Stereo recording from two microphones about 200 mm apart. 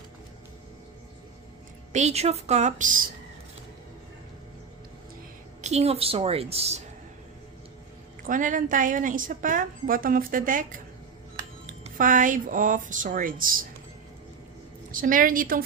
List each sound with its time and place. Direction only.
1.9 s a woman's voice: 35° right (ahead or behind)
5.6 s a woman's voice: 30° right (ahead or behind)
8.3 s a woman's voice: 40° right (ahead or behind)
14.9 s a woman's voice: 45° right (ahead or behind)